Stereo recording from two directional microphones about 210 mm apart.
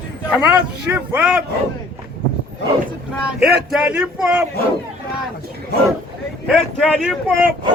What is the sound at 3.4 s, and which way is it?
Speech, 5° right (ahead or behind).